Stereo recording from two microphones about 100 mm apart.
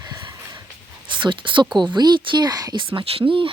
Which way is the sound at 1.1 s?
55° right (ahead or behind).